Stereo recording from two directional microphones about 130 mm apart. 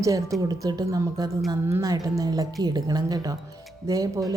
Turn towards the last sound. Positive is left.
turn(degrees=-25)  # may be behind; listen again after turning